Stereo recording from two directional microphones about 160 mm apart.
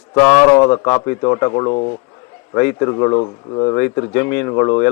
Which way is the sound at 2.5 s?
20° left (ahead or behind).